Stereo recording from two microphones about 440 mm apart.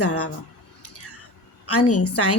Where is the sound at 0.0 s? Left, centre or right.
Left.